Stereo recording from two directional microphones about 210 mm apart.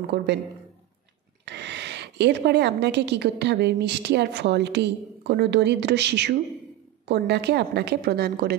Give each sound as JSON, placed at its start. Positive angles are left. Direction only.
{"t": 0.0, "sound": "a woman's voice", "side_deg": -55}
{"t": 1.4, "sound": "a woman's voice", "side_deg": -55}